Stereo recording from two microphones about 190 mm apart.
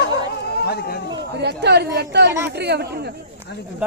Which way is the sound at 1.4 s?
65° right (ahead or behind).